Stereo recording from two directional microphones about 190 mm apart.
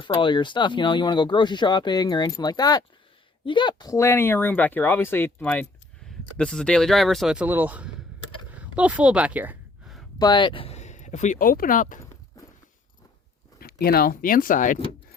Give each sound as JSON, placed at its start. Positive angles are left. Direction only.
{"t": 0.0, "sound": "speech", "side_deg": 25}
{"t": 8.4, "sound": "a sound", "side_deg": -5}
{"t": 10.2, "sound": "speech", "side_deg": 25}
{"t": 13.6, "sound": "speech", "side_deg": 55}